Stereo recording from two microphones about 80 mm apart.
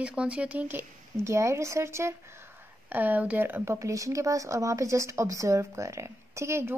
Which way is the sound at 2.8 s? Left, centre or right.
Right.